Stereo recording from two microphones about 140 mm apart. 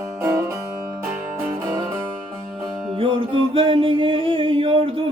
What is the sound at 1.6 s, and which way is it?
Music, 20° right (ahead or behind).